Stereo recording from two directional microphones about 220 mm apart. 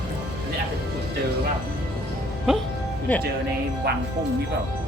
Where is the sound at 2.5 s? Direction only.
5° right (ahead or behind).